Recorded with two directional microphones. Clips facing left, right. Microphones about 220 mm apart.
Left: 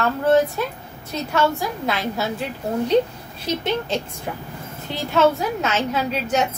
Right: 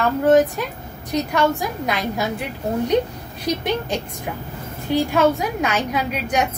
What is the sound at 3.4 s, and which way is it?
A woman's voice, 15° right (ahead or behind).